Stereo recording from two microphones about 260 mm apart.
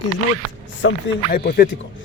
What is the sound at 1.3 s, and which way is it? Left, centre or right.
Speech, left.